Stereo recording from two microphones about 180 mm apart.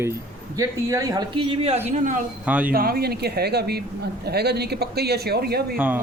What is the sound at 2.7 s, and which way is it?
Speech, 55° right (ahead or behind).